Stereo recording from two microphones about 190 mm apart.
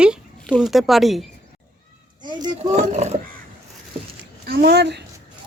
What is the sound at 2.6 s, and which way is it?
Speech, 40° right (ahead or behind).